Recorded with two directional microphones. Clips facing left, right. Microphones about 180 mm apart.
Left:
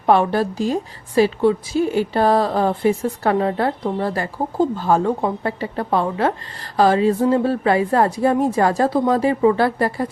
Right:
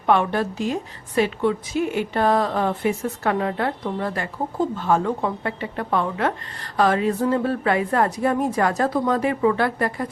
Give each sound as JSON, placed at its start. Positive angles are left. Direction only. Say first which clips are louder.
{"t": 0.0, "sound": "a woman's voice", "louder": "left 4 dB", "side_deg": 35}